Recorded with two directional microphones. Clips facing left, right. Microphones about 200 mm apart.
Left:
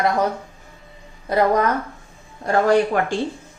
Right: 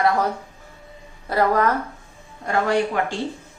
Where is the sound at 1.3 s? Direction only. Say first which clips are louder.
Left 2 dB; 20° left (ahead or behind).